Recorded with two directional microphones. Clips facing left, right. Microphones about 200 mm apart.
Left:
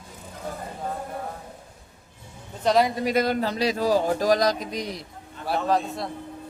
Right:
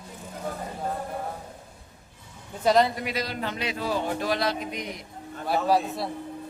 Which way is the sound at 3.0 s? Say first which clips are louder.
Left 8 dB; 50° left (ahead or behind).